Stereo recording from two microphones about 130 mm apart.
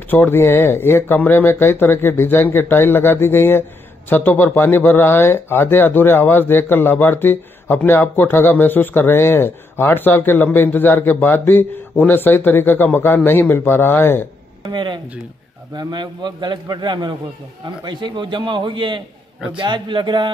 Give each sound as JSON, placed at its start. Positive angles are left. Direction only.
{"t": 0.1, "sound": "speech", "side_deg": 15}
{"t": 14.6, "sound": "a man's voice", "side_deg": -35}